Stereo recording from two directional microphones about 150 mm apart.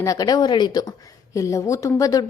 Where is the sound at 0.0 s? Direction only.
25° left (ahead or behind).